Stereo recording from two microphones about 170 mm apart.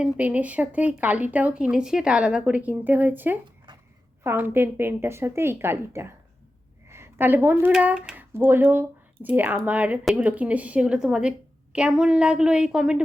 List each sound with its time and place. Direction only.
0.0 s speech: 10° right (ahead or behind)
3.7 s a sound: 25° right (ahead or behind)
4.2 s speech: 15° right (ahead or behind)